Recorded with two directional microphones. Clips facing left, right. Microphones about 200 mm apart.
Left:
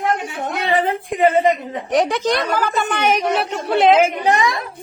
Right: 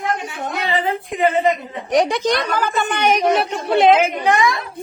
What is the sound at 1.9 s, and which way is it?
A woman's voice, 5° left (ahead or behind).